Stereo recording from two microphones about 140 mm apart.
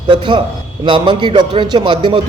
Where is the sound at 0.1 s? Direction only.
35° right (ahead or behind).